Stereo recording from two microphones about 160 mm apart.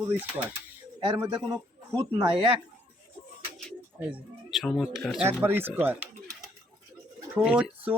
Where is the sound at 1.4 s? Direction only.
5° right (ahead or behind).